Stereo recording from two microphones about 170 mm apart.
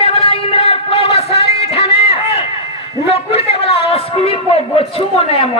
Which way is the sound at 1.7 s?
35° left (ahead or behind).